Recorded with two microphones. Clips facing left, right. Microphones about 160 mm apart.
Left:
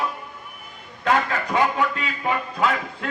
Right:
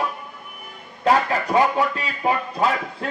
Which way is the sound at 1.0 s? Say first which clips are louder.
Right 3 dB; 35° right (ahead or behind).